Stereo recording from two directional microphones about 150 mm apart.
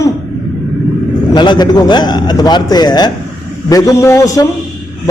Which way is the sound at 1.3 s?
30° left (ahead or behind).